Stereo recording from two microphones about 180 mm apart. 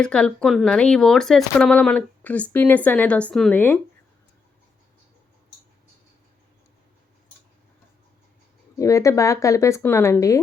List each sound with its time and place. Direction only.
0.0 s speech: 5° left (ahead or behind)
8.8 s speech: 15° left (ahead or behind)